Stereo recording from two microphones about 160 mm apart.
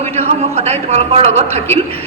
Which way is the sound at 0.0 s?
40° right (ahead or behind).